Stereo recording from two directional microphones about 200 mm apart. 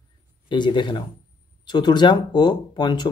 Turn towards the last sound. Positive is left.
turn(degrees=20)  # may be behind; listen again after turning